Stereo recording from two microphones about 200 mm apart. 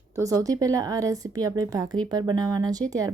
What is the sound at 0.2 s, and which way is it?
Speech, 15° right (ahead or behind).